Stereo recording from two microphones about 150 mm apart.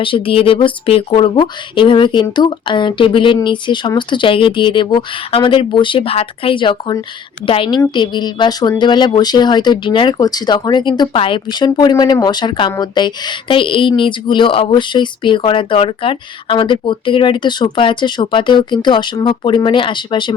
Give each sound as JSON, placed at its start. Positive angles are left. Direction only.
{"t": 0.0, "sound": "speech", "side_deg": 35}